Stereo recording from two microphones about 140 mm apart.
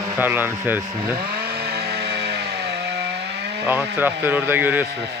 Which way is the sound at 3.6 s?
15° right (ahead or behind).